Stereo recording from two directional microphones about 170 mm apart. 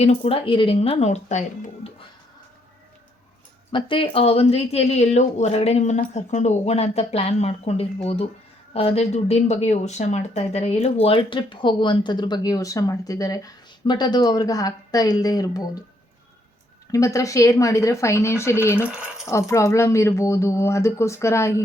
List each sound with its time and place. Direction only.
0.0 s speech: 35° left (ahead or behind)
3.7 s speech: 30° left (ahead or behind)
16.9 s speech: 20° left (ahead or behind)